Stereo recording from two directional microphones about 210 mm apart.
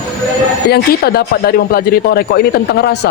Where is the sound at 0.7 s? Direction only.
50° left (ahead or behind).